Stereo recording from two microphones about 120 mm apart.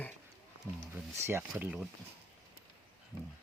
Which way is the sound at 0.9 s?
20° right (ahead or behind).